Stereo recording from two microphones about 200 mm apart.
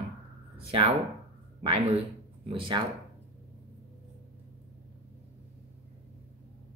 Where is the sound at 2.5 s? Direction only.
25° right (ahead or behind).